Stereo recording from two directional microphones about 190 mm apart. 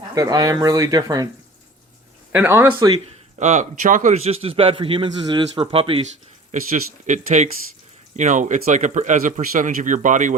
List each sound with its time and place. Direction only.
0.1 s speech: 20° right (ahead or behind)
2.3 s speech: 10° right (ahead or behind)
3.3 s a man's voice: 40° right (ahead or behind)
6.5 s a man's voice: 40° right (ahead or behind)